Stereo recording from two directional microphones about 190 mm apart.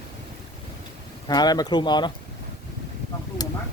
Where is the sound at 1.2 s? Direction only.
20° left (ahead or behind).